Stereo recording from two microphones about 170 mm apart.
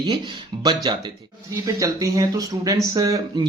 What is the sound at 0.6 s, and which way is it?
A man's voice, 25° right (ahead or behind).